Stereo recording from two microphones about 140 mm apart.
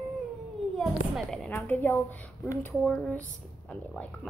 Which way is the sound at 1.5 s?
15° left (ahead or behind).